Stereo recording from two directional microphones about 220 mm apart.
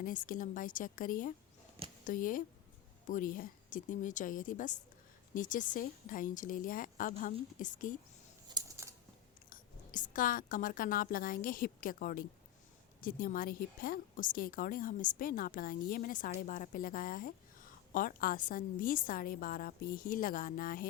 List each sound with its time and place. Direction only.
0.0 s a woman's voice: 40° left (ahead or behind)
8.5 s a sound: 15° right (ahead or behind)
9.5 s a woman's voice: 35° left (ahead or behind)